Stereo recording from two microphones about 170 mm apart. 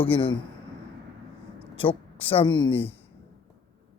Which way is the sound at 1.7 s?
35° left (ahead or behind).